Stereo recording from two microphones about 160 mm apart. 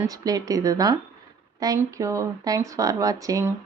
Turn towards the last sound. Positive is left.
turn(degrees=-20)  # may be behind; listen again after turning